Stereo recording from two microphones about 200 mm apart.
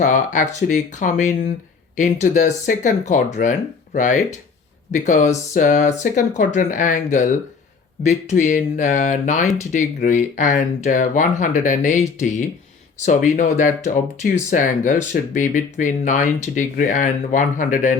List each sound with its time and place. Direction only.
0.0 s speech: 40° left (ahead or behind)
13.0 s speech: 40° left (ahead or behind)